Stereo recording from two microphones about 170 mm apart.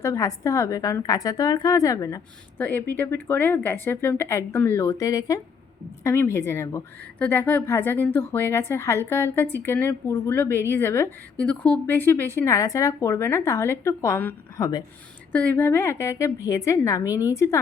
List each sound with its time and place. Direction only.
0.0 s a woman's voice: 20° left (ahead or behind)